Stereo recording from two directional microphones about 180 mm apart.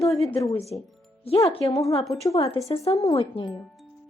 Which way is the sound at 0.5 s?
35° left (ahead or behind).